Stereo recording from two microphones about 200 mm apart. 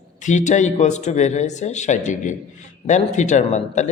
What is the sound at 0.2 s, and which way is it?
A man's voice, 40° left (ahead or behind).